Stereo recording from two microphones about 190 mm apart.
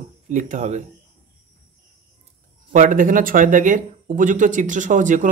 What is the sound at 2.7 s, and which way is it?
Speech, 45° right (ahead or behind).